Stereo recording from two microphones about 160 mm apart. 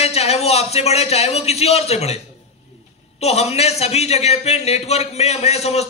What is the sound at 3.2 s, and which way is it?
A man's voice, 40° left (ahead or behind).